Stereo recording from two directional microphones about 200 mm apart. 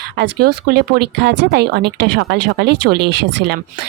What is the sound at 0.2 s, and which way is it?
Speech, 50° right (ahead or behind).